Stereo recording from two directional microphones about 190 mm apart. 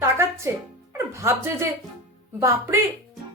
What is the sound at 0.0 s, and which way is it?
Music, 15° right (ahead or behind).